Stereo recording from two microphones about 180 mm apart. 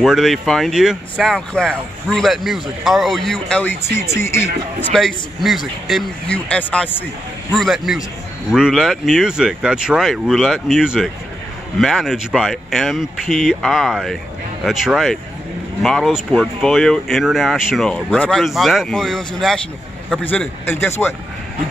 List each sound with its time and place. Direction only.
0.0 s speech: centre (ahead or behind)
4.9 s speech: centre (ahead or behind)